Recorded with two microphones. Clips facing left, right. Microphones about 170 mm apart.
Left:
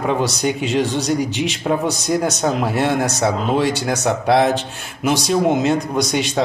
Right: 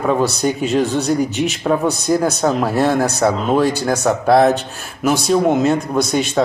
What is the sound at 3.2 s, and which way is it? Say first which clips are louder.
Speech: right 3 dB; 60° right (ahead or behind).